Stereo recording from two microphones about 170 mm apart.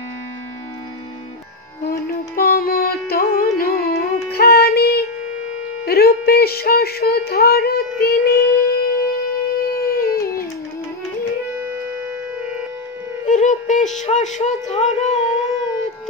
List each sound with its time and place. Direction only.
1.9 s music: 60° left (ahead or behind)
13.2 s music: 45° left (ahead or behind)
13.9 s a sound: 45° left (ahead or behind)